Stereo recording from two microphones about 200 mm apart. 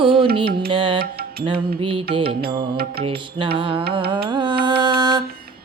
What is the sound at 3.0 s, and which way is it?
Music, 25° right (ahead or behind).